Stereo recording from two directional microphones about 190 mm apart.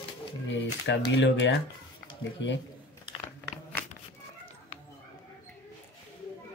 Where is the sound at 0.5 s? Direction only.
70° left (ahead or behind).